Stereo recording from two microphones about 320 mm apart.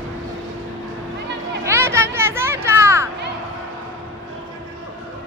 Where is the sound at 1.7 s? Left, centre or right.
Centre.